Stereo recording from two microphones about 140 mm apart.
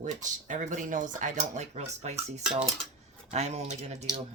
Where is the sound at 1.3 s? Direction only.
55° right (ahead or behind).